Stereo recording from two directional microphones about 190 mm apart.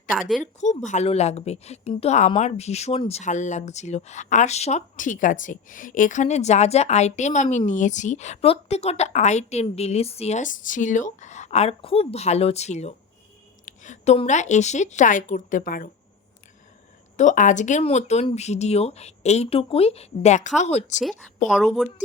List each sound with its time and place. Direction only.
0.6 s speech: 40° left (ahead or behind)
17.2 s speech: 40° left (ahead or behind)
21.5 s a woman's voice: centre (ahead or behind)